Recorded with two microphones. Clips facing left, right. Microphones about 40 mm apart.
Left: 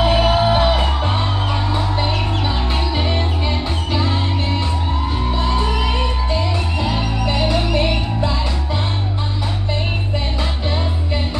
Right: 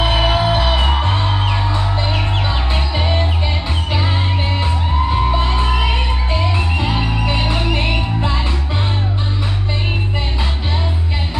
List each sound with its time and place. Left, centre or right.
0.1 s music: right
2.0 s music: centre; by 8.4 s right